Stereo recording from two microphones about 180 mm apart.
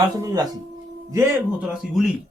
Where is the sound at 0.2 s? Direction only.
15° right (ahead or behind).